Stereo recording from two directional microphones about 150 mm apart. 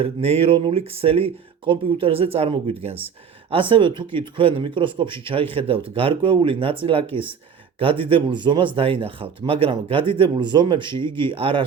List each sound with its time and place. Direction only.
0.0 s speech: 40° right (ahead or behind)